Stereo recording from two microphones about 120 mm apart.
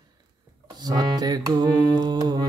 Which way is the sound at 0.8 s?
35° right (ahead or behind).